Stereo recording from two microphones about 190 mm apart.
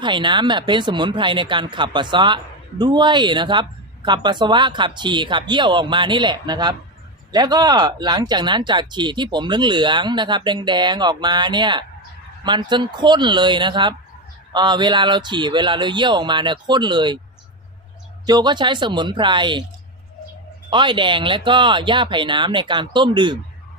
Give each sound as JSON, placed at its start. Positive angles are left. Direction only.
{"t": 0.0, "sound": "speech", "side_deg": -25}
{"t": 18.3, "sound": "speech", "side_deg": -20}
{"t": 20.7, "sound": "speech", "side_deg": -25}